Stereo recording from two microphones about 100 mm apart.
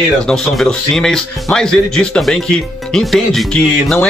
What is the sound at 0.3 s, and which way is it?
Speech, 5° left (ahead or behind).